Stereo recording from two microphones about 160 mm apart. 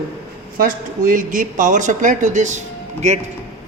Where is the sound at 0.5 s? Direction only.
55° right (ahead or behind).